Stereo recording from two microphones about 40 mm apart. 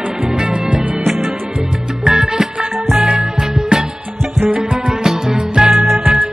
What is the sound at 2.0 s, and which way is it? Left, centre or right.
Music, centre.